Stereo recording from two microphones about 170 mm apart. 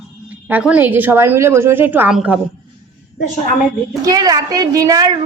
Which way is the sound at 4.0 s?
20° right (ahead or behind).